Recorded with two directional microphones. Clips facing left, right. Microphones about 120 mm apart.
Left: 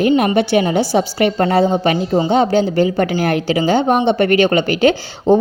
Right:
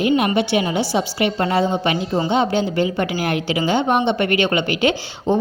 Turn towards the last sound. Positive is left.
turn(degrees=40)  # may be behind; listen again after turning